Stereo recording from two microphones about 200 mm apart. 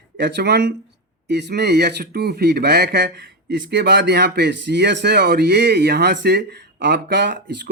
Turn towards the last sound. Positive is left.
turn(degrees=-60)  # may be behind; listen again after turning